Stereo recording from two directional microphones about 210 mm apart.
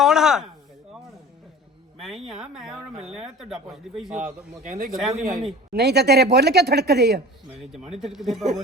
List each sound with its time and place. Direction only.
0.0 s a sound: centre (ahead or behind)
2.0 s speech: centre (ahead or behind)
4.2 s speech: 35° right (ahead or behind)
4.9 s speech: centre (ahead or behind)
5.7 s speech: 50° right (ahead or behind)
7.6 s speech: centre (ahead or behind)